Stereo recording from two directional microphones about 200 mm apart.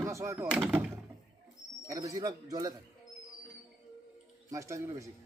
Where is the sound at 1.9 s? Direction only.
15° right (ahead or behind).